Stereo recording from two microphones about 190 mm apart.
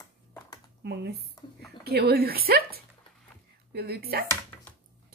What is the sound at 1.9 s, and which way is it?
A woman's voice, 55° right (ahead or behind).